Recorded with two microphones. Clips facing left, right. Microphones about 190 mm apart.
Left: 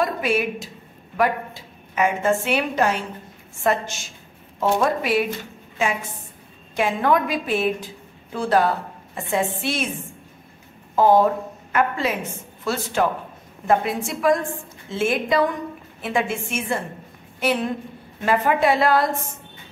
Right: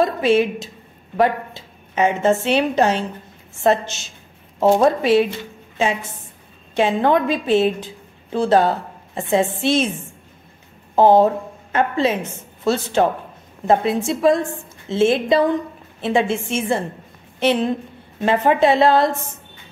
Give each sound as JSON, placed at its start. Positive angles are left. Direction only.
{"t": 0.0, "sound": "a woman's voice", "side_deg": -25}
{"t": 4.6, "sound": "a woman's voice", "side_deg": -30}
{"t": 6.7, "sound": "a woman's voice", "side_deg": -25}
{"t": 11.0, "sound": "a woman's voice", "side_deg": -25}